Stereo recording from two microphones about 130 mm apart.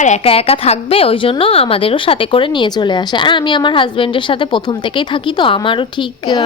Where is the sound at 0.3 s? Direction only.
50° left (ahead or behind).